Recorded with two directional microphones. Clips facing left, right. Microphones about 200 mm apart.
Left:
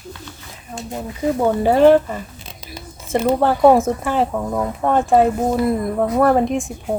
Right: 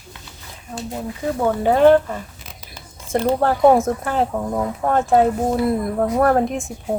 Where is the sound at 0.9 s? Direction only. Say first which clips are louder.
Left 4 dB; 15° left (ahead or behind).